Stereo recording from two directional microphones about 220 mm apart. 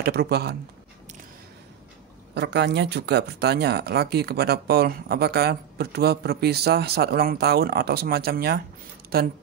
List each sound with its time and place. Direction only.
0.0 s speech: 45° right (ahead or behind)
2.3 s speech: 50° right (ahead or behind)